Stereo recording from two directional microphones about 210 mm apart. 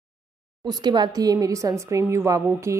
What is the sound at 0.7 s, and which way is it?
A woman's voice, 20° right (ahead or behind).